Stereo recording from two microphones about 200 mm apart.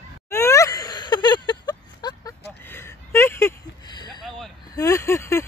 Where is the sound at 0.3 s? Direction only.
15° left (ahead or behind).